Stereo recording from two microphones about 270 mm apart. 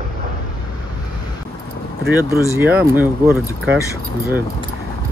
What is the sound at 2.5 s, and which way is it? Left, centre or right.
Speech, centre.